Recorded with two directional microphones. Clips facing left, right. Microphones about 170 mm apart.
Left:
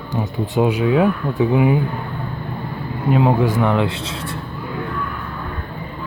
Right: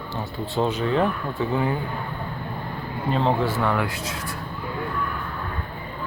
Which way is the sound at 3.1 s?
10° left (ahead or behind).